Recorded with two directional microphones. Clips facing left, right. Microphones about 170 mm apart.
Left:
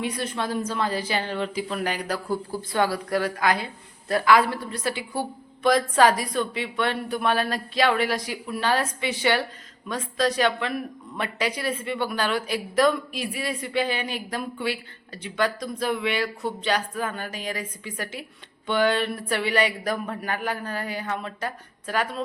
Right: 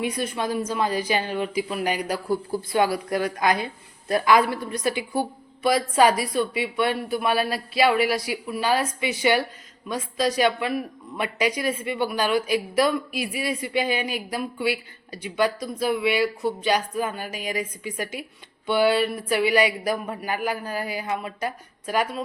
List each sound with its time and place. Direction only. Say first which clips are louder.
0.0 s a woman's voice: right 2 dB; 15° right (ahead or behind)